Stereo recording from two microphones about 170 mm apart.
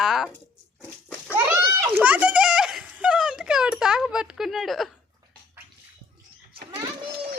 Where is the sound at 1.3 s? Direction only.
15° right (ahead or behind).